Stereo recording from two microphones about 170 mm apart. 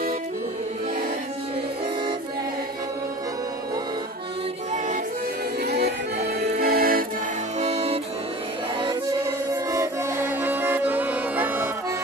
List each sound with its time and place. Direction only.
5.7 s music: 75° right (ahead or behind)
7.6 s music: 35° right (ahead or behind)
9.5 s music: 15° right (ahead or behind)